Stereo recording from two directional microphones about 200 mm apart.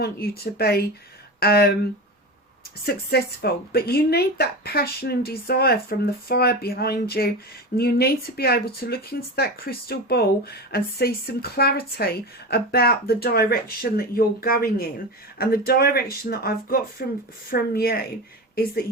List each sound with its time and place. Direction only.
0.0 s speech: 50° left (ahead or behind)
2.8 s speech: 50° left (ahead or behind)